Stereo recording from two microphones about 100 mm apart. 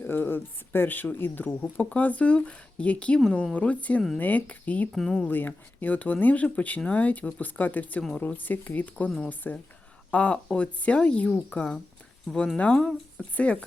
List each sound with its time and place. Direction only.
0.0 s speech: 20° left (ahead or behind)
4.9 s speech: 5° left (ahead or behind)
5.2 s speech: 15° left (ahead or behind)
9.0 s speech: 5° left (ahead or behind)